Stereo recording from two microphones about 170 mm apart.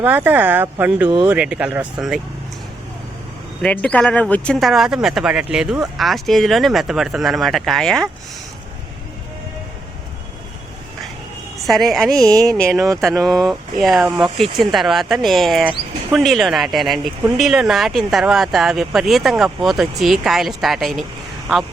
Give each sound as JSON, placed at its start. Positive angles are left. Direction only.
{"t": 0.0, "sound": "speech", "side_deg": -10}
{"t": 1.0, "sound": "speech", "side_deg": -25}
{"t": 1.3, "sound": "speech", "side_deg": -5}
{"t": 3.6, "sound": "speech", "side_deg": 10}
{"t": 11.6, "sound": "speech", "side_deg": 0}